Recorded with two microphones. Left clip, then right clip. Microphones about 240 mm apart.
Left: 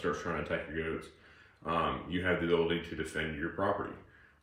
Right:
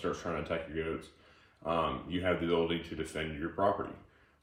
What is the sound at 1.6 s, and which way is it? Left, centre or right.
Speech, right.